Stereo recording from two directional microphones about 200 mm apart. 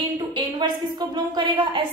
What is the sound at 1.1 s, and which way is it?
Speech, 20° right (ahead or behind).